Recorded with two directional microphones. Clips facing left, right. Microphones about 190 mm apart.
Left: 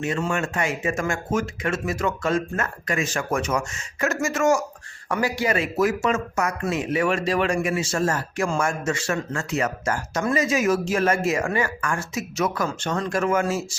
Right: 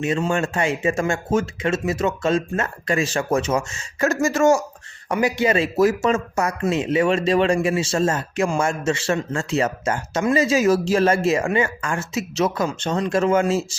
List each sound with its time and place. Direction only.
0.0 s speech: 20° right (ahead or behind)
5.0 s speech: 20° right (ahead or behind)